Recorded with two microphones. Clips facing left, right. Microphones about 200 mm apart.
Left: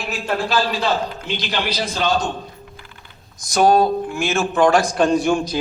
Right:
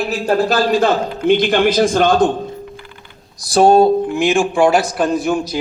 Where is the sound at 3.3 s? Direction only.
30° right (ahead or behind).